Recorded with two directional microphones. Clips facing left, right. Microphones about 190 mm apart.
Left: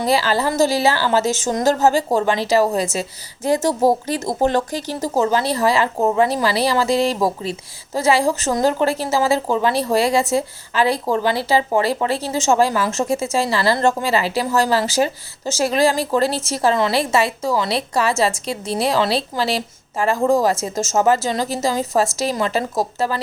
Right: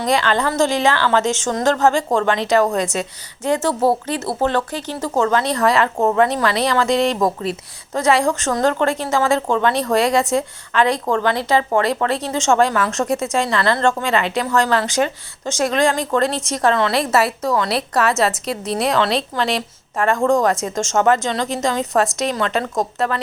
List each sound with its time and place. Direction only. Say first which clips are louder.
0.0 s a woman's voice: even; 5° left (ahead or behind)
13.7 s a woman's voice: even; 15° left (ahead or behind)
14.1 s a woman's voice: even; 5° left (ahead or behind)